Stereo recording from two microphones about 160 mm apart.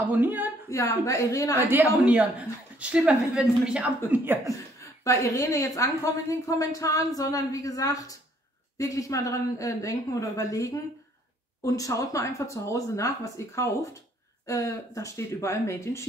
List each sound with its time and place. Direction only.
0.1 s speech: 10° right (ahead or behind)
0.7 s a woman's voice: 20° left (ahead or behind)
2.0 s speech: 10° right (ahead or behind)
4.5 s a woman's voice: 20° left (ahead or behind)